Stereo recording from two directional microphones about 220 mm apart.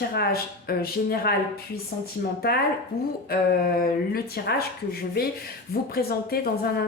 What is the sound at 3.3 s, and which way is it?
Speech, 40° left (ahead or behind).